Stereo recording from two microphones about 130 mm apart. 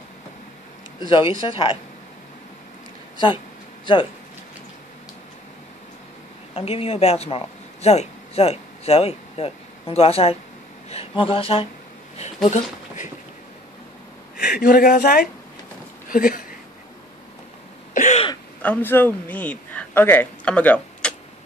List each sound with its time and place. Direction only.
1.4 s speech: 40° left (ahead or behind)
3.8 s speech: 40° left (ahead or behind)
6.5 s speech: 50° left (ahead or behind)
12.4 s speech: 65° left (ahead or behind)
14.3 s speech: 90° left
17.9 s throat clearing: 70° left (ahead or behind)
18.6 s a man's voice: 15° left (ahead or behind)